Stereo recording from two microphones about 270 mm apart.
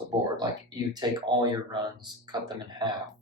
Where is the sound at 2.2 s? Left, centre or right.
Centre.